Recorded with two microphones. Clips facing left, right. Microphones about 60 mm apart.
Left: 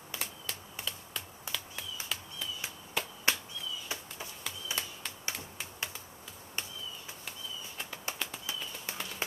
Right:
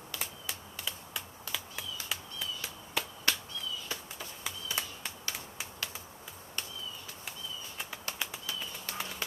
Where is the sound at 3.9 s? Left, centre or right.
Left.